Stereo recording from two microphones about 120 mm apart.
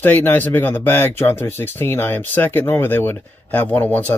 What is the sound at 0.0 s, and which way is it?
Speech, 15° left (ahead or behind).